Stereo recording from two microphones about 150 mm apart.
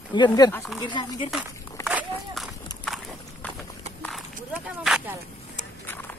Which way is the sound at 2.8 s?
Centre (ahead or behind).